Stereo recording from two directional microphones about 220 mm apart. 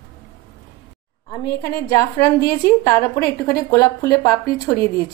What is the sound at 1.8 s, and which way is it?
A woman's voice, 15° left (ahead or behind).